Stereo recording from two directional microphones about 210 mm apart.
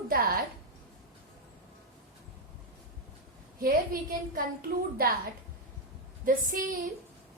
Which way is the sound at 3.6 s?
45° right (ahead or behind).